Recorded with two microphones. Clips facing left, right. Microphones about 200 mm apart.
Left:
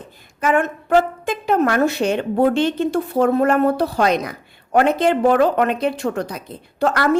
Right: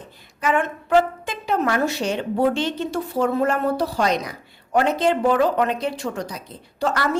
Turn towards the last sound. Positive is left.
turn(degrees=55)  # may be behind; listen again after turning